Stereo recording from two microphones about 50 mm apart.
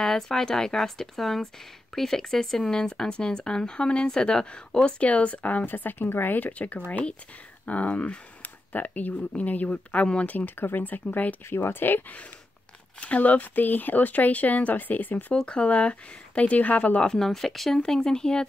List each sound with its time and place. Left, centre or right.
0.0 s speech: centre; by 5.7 s left
5.7 s speech: left
11.4 s speech: left
13.0 s speech: left
15.3 s speech: left
17.3 s speech: centre